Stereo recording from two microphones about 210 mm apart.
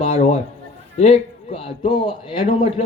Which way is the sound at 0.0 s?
30° left (ahead or behind).